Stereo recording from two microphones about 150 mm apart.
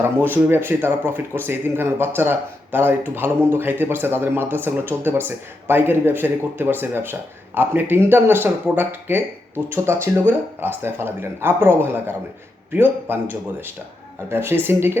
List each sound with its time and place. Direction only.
0.0 s speech: 15° right (ahead or behind)